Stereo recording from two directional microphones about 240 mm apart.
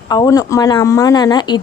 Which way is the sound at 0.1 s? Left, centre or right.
Centre.